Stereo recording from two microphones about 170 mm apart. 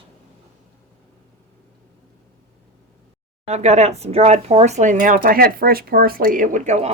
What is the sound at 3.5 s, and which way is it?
Speech, 40° right (ahead or behind).